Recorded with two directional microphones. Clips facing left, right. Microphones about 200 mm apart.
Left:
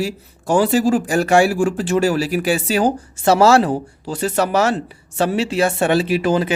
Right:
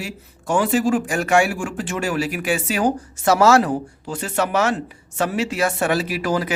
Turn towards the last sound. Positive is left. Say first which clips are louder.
# left 5 dB
turn(degrees=25)  # may be behind; listen again after turning